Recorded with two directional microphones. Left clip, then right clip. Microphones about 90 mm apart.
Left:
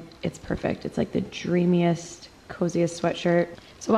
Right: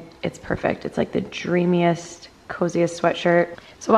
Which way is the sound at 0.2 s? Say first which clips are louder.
Right 5 dB; 20° right (ahead or behind).